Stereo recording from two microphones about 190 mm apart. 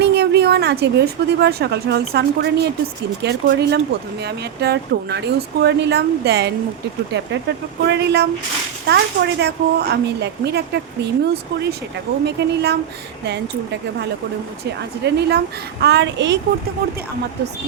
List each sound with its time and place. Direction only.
0.0 s a woman's voice: 60° right (ahead or behind)
7.9 s a woman's voice: 60° right (ahead or behind)
12.2 s a woman's voice: 60° right (ahead or behind)
14.6 s a woman's voice: 60° right (ahead or behind)